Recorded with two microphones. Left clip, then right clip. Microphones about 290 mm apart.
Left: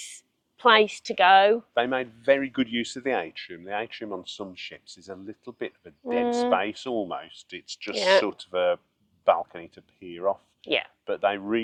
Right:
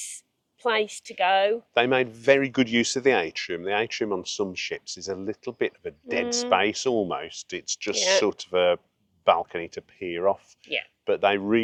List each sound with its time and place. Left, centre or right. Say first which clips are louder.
0.6 s a woman's voice: left 6 dB; left
1.7 s speech: right 4 dB; right
8.2 s speech: right 3 dB; right
10.6 s speech: left 3 dB; left
11.0 s speech: right 3 dB; right